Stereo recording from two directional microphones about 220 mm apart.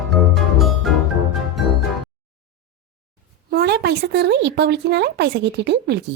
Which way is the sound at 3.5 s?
50° right (ahead or behind).